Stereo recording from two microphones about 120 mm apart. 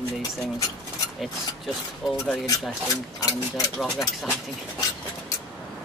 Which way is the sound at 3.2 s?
30° left (ahead or behind).